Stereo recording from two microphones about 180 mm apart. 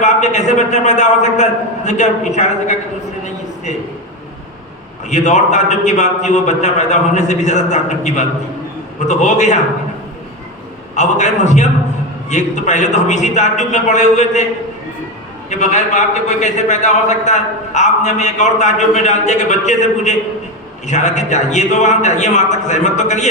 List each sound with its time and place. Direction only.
0.0 s a man's voice: 40° left (ahead or behind)
5.0 s a man's voice: 40° left (ahead or behind)
10.9 s a man's voice: 40° left (ahead or behind)
15.4 s a man's voice: 40° left (ahead or behind)